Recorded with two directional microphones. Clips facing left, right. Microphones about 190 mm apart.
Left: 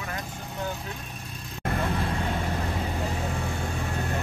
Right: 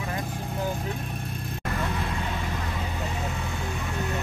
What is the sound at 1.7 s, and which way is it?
Vehicle, 30° left (ahead or behind).